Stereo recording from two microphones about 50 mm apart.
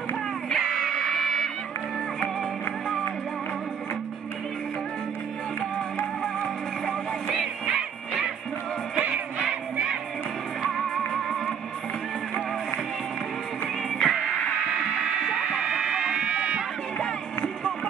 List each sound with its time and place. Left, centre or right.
0.6 s music: centre
1.0 s music: centre
6.2 s music: centre
10.7 s music: centre
13.8 s music: centre
15.0 s music: centre